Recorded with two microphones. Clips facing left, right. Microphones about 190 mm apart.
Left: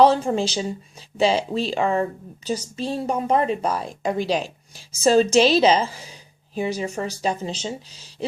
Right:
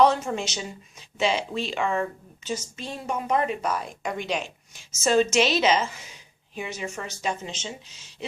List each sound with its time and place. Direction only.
0.0 s a woman's voice: 30° left (ahead or behind)